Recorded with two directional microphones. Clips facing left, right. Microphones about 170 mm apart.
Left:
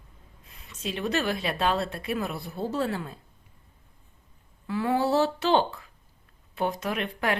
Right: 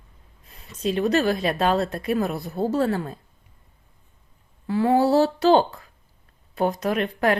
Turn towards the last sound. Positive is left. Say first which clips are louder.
# right 7 dB
turn(degrees=-40)  # may be behind; listen again after turning